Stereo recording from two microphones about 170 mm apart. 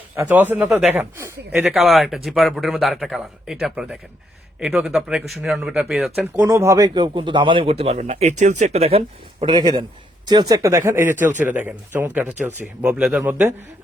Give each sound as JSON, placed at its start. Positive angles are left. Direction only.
{"t": 0.2, "sound": "a man's voice", "side_deg": -10}
{"t": 10.5, "sound": "speech", "side_deg": -15}